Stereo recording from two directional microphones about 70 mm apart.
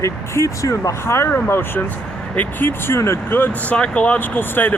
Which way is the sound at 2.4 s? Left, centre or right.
Left.